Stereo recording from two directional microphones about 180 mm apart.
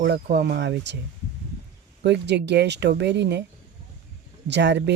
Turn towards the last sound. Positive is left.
turn(degrees=-70)  # may be behind; listen again after turning